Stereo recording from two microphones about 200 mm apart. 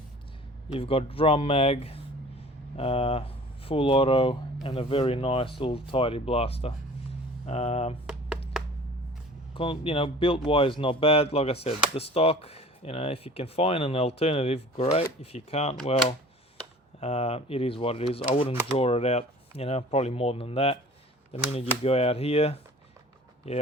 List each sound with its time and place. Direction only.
0.7 s speech: 30° left (ahead or behind)
9.6 s speech: 25° left (ahead or behind)
17.0 s speech: 30° left (ahead or behind)
21.8 s speech: 30° left (ahead or behind)